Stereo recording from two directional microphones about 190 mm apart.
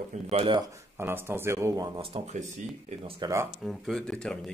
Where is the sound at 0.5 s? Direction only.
15° right (ahead or behind); by 3.2 s 30° right (ahead or behind).